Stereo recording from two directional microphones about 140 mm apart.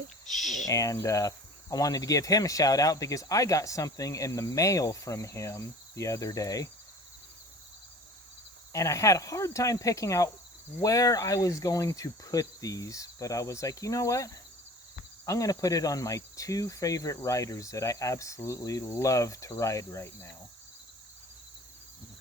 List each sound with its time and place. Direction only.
0.3 s speech: centre (ahead or behind)
0.7 s speech: 25° left (ahead or behind)
8.7 s speech: 20° left (ahead or behind)